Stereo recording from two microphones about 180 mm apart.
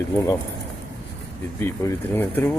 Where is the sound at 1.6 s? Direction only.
15° left (ahead or behind).